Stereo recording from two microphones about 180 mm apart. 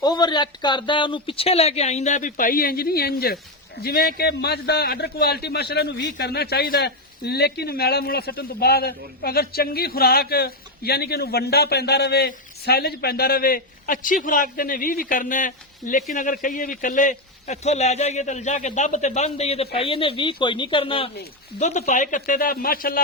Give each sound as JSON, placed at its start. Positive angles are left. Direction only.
{"t": 0.0, "sound": "a man's voice", "side_deg": 25}
{"t": 21.6, "sound": "speech", "side_deg": 40}